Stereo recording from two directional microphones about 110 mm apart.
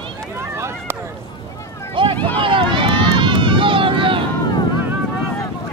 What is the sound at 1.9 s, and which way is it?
Speech, 50° right (ahead or behind).